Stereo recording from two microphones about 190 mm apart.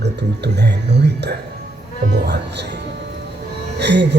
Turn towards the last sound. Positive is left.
turn(degrees=-65)  # may be behind; listen again after turning